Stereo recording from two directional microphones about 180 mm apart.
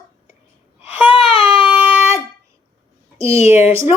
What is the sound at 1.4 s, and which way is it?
Baby cry, 5° right (ahead or behind).